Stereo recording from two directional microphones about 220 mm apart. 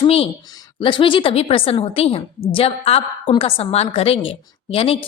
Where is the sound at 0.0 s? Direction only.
25° left (ahead or behind).